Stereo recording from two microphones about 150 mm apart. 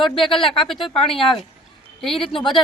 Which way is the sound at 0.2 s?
Centre (ahead or behind).